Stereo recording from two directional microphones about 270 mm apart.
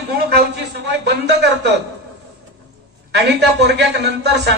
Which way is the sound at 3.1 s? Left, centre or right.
Right.